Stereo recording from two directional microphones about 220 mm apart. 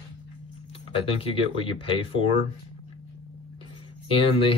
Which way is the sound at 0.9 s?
25° left (ahead or behind).